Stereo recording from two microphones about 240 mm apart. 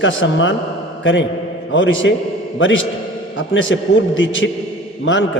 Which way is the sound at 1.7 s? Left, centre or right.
Left.